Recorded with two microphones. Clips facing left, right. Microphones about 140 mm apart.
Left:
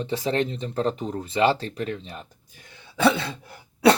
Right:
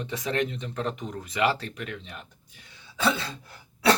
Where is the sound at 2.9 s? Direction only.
60° left (ahead or behind).